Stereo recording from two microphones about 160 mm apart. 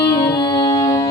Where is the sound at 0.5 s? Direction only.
25° left (ahead or behind).